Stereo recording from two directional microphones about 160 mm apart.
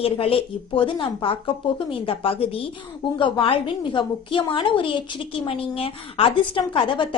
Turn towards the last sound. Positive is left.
turn(degrees=30)  # may be behind; listen again after turning